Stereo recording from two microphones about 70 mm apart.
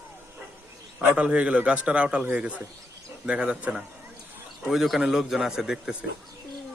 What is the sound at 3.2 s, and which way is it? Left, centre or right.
Speech, centre.